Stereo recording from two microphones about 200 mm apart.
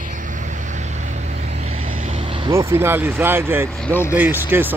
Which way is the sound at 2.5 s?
15° right (ahead or behind).